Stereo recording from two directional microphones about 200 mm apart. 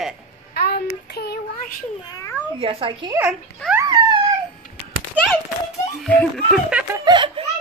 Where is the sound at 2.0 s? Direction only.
20° left (ahead or behind).